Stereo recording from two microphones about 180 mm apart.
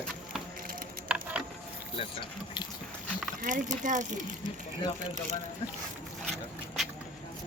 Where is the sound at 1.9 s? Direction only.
30° left (ahead or behind).